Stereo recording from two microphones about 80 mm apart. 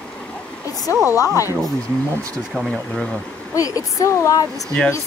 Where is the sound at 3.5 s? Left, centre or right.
Left.